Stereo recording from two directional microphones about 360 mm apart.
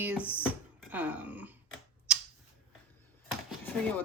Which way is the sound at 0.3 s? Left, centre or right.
Centre.